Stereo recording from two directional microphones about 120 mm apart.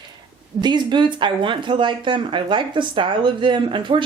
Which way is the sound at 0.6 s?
40° right (ahead or behind).